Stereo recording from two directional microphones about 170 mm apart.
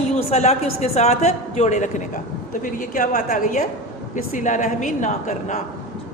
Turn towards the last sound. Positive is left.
turn(degrees=45)  # may be behind; listen again after turning